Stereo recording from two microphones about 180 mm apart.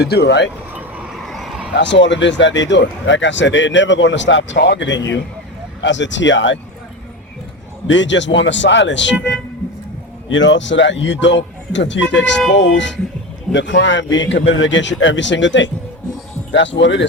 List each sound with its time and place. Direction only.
0.0 s speech: 65° left (ahead or behind)
0.7 s vehicle: 10° right (ahead or behind)
1.2 s a sound: centre (ahead or behind)
1.7 s speech: 85° left
7.9 s speech: 90° left
10.2 s speech: 90° left